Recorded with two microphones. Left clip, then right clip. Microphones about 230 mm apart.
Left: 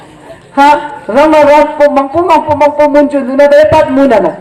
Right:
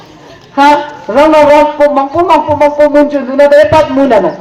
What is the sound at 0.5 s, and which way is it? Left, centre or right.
A man's voice, left.